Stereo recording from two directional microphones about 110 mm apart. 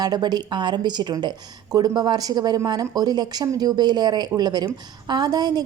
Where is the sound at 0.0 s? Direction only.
40° right (ahead or behind).